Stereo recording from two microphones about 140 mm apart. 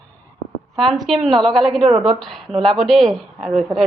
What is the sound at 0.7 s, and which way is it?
Speech, centre (ahead or behind).